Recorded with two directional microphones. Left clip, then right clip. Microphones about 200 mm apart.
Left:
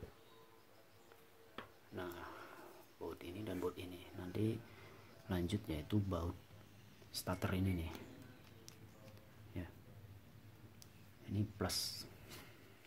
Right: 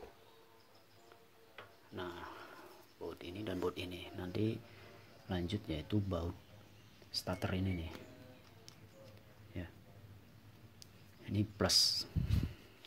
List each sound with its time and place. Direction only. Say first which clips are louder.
2.0 s a sound: right 2 dB; 10° right (ahead or behind)
3.0 s speech: right 3 dB; 10° right (ahead or behind); by 4.3 s 25° right (ahead or behind)
4.3 s speech: right 2 dB; 10° right (ahead or behind)
9.6 s speech: right 2 dB; 5° right (ahead or behind)
11.3 s speech: right 10 dB; 30° right (ahead or behind)